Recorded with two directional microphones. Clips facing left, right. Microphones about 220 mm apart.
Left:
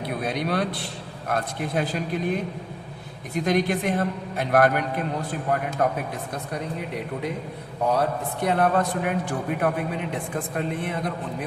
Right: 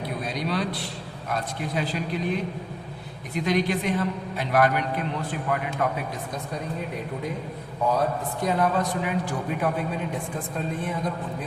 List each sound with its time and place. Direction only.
0.3 s a man's voice: 55° left (ahead or behind)
5.3 s speech: 40° left (ahead or behind)
7.9 s speech: 65° left (ahead or behind)
10.5 s speech: 70° left (ahead or behind)